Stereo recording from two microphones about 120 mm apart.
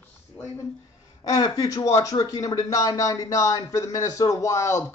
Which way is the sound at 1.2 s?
30° left (ahead or behind).